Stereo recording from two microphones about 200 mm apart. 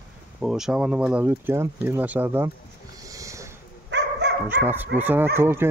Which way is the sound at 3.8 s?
60° right (ahead or behind).